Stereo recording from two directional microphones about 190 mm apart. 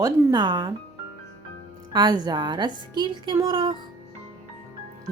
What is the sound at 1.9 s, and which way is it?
A woman's voice, 20° right (ahead or behind).